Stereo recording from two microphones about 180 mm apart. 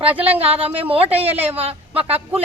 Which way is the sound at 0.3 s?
30° right (ahead or behind).